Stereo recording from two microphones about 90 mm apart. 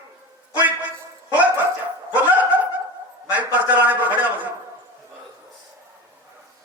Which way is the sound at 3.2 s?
15° right (ahead or behind).